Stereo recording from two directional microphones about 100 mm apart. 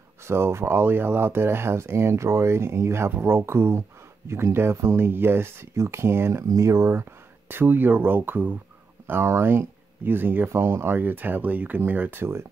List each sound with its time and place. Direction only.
0.3 s speech: 25° right (ahead or behind)